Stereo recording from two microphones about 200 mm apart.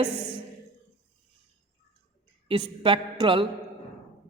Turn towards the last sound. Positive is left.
turn(degrees=-25)  # may be behind; listen again after turning